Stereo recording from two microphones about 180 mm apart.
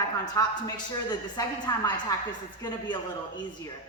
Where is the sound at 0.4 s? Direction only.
15° left (ahead or behind).